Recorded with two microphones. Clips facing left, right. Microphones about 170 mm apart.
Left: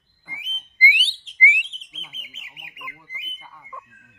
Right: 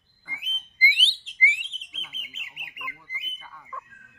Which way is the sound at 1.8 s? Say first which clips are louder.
Left 1 dB; 45° left (ahead or behind).